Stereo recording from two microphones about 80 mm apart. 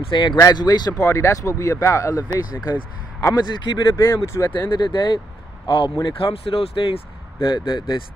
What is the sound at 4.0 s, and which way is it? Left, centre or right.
Speech, left.